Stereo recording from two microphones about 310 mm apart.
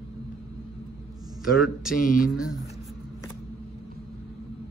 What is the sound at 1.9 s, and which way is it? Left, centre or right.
Speech, left.